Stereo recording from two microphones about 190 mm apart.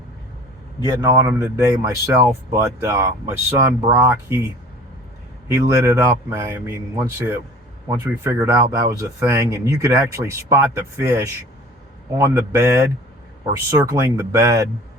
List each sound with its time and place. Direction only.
1.0 s speech: 15° right (ahead or behind)
5.5 s speech: 15° right (ahead or behind)